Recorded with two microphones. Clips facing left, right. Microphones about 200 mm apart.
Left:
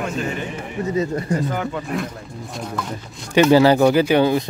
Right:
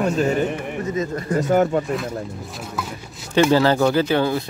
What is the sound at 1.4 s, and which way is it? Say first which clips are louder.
Speech: right 7 dB; 45° right (ahead or behind).